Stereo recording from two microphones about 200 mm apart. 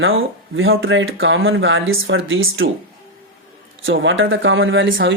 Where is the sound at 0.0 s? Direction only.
80° right.